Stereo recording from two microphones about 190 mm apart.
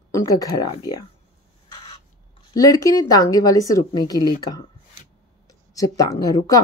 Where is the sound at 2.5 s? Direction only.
20° left (ahead or behind).